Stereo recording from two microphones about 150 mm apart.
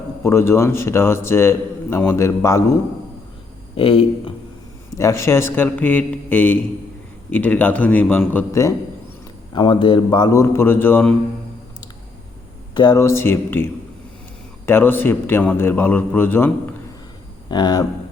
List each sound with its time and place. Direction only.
0.2 s a man's voice: 15° left (ahead or behind)
3.8 s a man's voice: 35° left (ahead or behind)
4.9 s a man's voice: 20° left (ahead or behind)
9.6 s a man's voice: 35° left (ahead or behind); by 11.1 s 15° left (ahead or behind)
12.7 s a man's voice: 30° left (ahead or behind)
14.7 s a man's voice: 15° left (ahead or behind)
17.5 s a man's voice: 30° left (ahead or behind)